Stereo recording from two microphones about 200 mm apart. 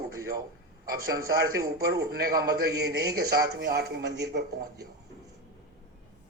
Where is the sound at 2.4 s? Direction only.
50° right (ahead or behind).